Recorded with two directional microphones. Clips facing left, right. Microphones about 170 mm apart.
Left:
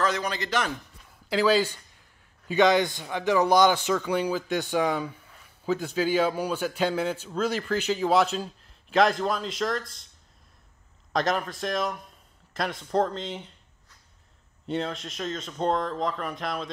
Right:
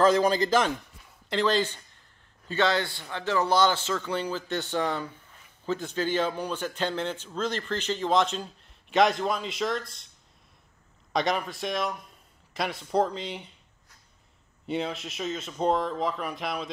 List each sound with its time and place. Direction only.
0.0 s a man's voice: 30° right (ahead or behind)
1.3 s a man's voice: 5° left (ahead or behind)
11.1 s speech: centre (ahead or behind)
14.7 s speech: 5° right (ahead or behind)